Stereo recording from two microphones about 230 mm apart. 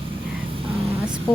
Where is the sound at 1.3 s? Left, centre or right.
Centre.